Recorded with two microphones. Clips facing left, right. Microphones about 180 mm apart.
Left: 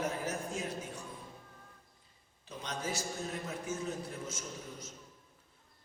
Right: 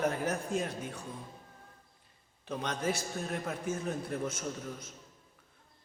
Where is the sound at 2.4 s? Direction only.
60° right (ahead or behind).